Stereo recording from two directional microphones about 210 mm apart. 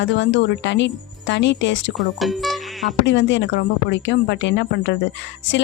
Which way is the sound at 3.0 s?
60° left (ahead or behind).